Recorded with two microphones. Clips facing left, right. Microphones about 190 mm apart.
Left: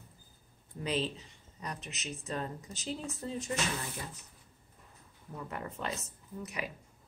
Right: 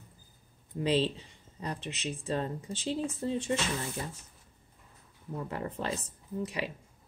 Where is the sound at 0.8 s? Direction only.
30° right (ahead or behind).